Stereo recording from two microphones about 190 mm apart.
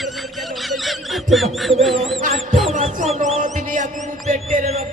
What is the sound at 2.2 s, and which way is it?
Music, 45° right (ahead or behind).